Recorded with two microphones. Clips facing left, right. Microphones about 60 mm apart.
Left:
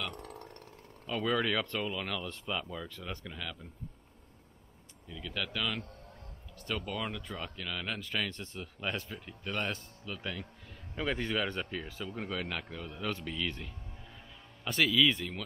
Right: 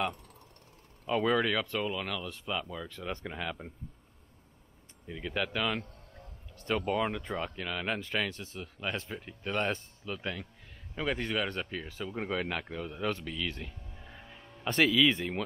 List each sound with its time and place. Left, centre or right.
0.1 s a sound: left
1.0 s speech: centre
3.1 s speech: right
5.0 s speech: right
6.6 s speech: right
8.4 s speech: centre
8.9 s speech: centre
13.6 s music: centre
14.8 s speech: centre